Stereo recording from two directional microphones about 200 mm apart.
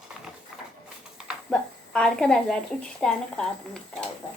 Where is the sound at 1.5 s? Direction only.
Centre (ahead or behind).